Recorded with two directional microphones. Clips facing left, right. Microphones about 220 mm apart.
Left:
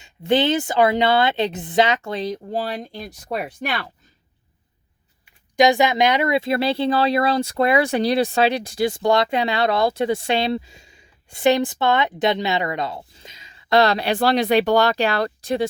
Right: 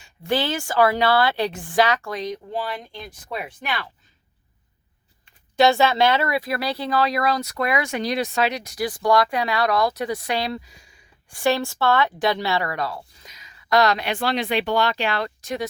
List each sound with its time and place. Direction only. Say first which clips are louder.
0.0 s speech: left 5 dB; 20° left (ahead or behind); by 3.8 s 45° left (ahead or behind)
5.2 s speech: left 1 dB; 15° left (ahead or behind); by 15.7 s 30° left (ahead or behind)